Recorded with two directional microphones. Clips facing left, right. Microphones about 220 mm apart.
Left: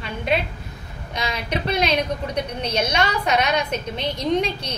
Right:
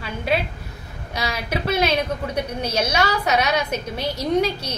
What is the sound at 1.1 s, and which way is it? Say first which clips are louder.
A woman's voice: even; 10° right (ahead or behind).